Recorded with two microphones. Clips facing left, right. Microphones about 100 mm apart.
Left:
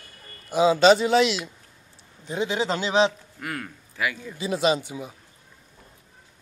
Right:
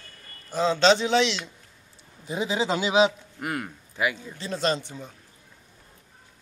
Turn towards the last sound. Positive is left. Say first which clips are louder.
# left 4 dB
turn(degrees=10)  # may be behind; listen again after turning